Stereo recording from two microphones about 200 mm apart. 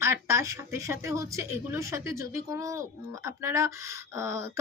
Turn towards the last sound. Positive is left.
turn(degrees=-15)  # may be behind; listen again after turning